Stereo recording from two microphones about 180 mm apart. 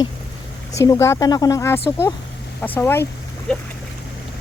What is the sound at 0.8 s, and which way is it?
Speech, 15° left (ahead or behind).